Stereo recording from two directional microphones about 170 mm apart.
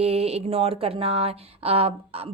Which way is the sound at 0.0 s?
35° right (ahead or behind).